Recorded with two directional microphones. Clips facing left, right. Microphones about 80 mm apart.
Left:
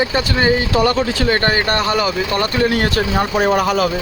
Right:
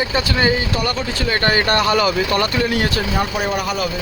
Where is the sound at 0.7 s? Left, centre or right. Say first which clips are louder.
Left 6 dB; left.